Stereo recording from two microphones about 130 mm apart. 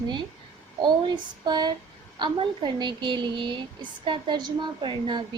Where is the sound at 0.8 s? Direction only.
35° right (ahead or behind).